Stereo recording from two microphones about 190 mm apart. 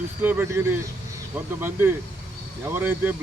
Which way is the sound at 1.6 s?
10° right (ahead or behind).